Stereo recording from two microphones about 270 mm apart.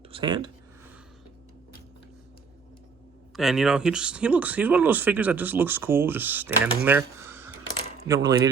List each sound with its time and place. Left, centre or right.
0.1 s speech: centre
3.3 s speech: centre